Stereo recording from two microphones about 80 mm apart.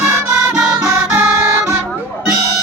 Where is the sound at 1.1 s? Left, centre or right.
Right.